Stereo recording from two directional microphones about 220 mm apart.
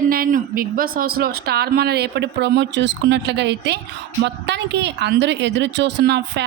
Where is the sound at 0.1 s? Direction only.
40° right (ahead or behind).